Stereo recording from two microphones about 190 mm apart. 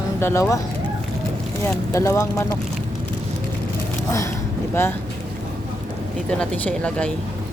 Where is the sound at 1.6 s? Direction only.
15° left (ahead or behind).